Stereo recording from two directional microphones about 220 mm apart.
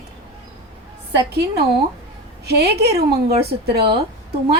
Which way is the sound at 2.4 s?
50° right (ahead or behind).